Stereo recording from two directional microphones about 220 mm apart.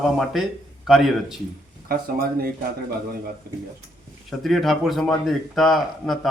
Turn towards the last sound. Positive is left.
turn(degrees=0)  # may be behind; listen again after turning